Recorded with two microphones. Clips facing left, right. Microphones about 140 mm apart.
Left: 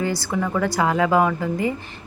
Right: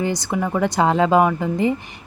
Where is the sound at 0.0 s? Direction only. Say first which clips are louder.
Right 1 dB; 20° right (ahead or behind).